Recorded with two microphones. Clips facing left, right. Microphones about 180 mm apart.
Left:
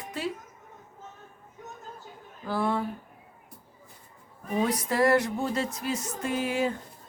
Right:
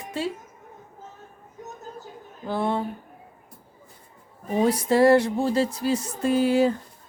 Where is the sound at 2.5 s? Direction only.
25° right (ahead or behind).